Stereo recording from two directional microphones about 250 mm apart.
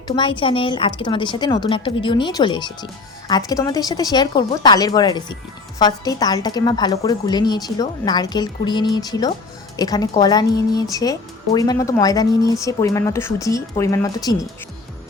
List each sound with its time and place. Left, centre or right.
0.2 s a woman's voice: centre